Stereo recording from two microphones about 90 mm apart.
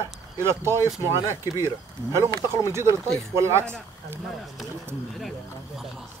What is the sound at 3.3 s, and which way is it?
Speech, 30° right (ahead or behind).